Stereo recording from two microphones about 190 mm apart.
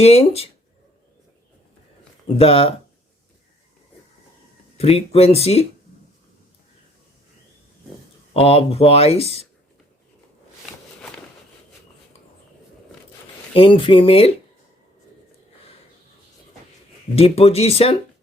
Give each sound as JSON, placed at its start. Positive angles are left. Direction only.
{"t": 0.0, "sound": "speech", "side_deg": 30}
{"t": 2.2, "sound": "speech", "side_deg": 30}
{"t": 4.8, "sound": "speech", "side_deg": 30}
{"t": 8.3, "sound": "speech", "side_deg": 30}
{"t": 13.5, "sound": "speech", "side_deg": 30}
{"t": 17.2, "sound": "speech", "side_deg": 30}